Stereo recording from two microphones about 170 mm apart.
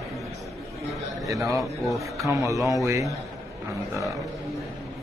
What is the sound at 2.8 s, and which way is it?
Speech, 20° right (ahead or behind).